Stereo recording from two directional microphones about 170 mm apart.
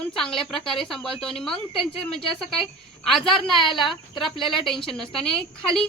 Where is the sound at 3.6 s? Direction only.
30° left (ahead or behind).